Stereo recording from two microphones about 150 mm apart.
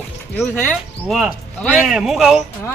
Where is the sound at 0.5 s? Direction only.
10° left (ahead or behind).